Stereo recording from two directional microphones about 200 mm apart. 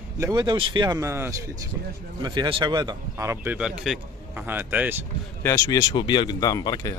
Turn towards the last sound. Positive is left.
turn(degrees=20)  # may be behind; listen again after turning